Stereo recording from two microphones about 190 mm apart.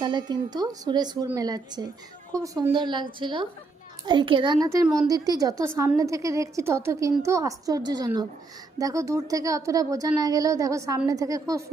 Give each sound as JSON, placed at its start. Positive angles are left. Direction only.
{"t": 0.0, "sound": "a woman's voice", "side_deg": -25}